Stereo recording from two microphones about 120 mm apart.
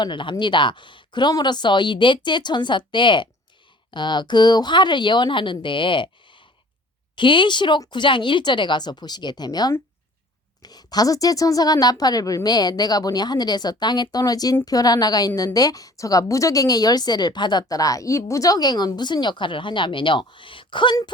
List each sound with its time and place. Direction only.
0.0 s a woman's voice: 40° left (ahead or behind)